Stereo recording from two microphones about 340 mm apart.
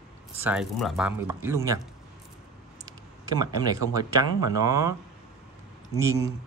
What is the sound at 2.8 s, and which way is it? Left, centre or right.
Speech, centre.